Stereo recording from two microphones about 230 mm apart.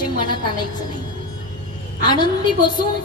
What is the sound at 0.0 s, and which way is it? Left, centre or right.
Speech, centre.